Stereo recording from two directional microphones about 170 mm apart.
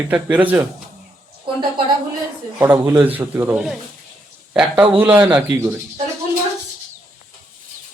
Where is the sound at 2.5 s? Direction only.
15° right (ahead or behind).